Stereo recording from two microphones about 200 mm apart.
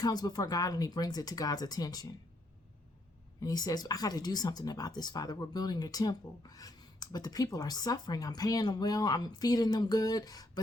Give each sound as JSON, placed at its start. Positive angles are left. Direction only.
{"t": 0.0, "sound": "speech", "side_deg": 20}
{"t": 3.4, "sound": "speech", "side_deg": 20}